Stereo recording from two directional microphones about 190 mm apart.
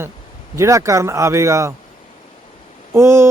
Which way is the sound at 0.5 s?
15° right (ahead or behind).